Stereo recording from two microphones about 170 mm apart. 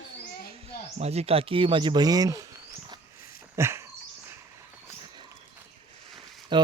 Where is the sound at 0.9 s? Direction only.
40° right (ahead or behind); by 2.5 s 20° right (ahead or behind).